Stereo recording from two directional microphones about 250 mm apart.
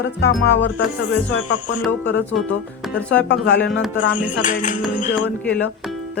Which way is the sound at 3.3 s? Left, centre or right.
Left.